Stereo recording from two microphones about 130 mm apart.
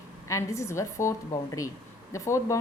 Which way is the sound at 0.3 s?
25° left (ahead or behind).